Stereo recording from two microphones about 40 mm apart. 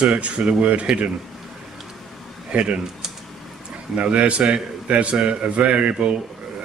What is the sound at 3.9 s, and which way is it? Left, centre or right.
A man's voice, right.